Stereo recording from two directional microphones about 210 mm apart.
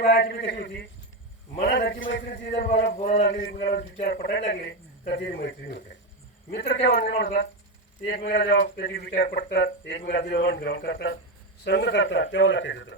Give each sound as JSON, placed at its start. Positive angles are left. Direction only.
{"t": 0.0, "sound": "a man's voice", "side_deg": 45}
{"t": 1.9, "sound": "a man's voice", "side_deg": 60}
{"t": 3.2, "sound": "a man's voice", "side_deg": 40}